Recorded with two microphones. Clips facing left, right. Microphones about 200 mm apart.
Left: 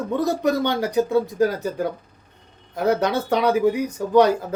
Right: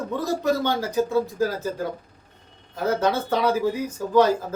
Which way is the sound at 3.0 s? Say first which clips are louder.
Left 1 dB; 15° left (ahead or behind).